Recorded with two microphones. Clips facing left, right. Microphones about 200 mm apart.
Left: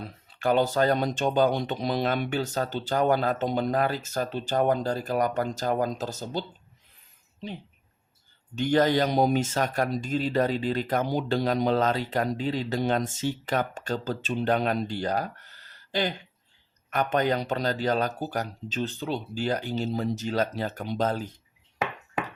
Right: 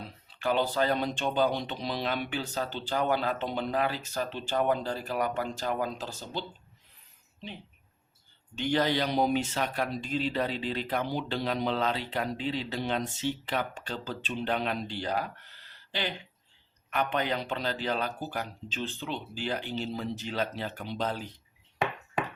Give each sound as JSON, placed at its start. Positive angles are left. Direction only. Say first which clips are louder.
{"t": 0.0, "sound": "speech", "louder": "left 4 dB", "side_deg": 45}
{"t": 8.5, "sound": "speech", "louder": "left 5 dB", "side_deg": 45}